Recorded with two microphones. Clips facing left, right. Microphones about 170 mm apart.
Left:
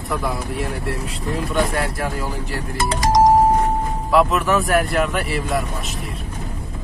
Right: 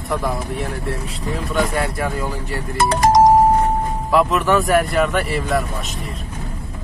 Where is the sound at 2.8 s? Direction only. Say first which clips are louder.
Right 4 dB; 60° right (ahead or behind).